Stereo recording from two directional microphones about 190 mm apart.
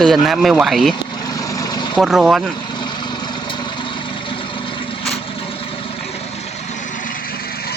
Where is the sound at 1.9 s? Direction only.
5° right (ahead or behind).